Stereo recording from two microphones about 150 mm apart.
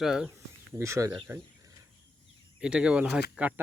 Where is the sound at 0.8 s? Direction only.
20° right (ahead or behind).